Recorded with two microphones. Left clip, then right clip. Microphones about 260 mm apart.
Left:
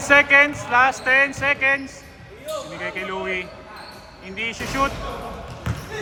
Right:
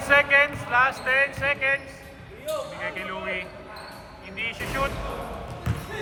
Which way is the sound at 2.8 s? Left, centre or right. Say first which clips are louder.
Left 4 dB; centre.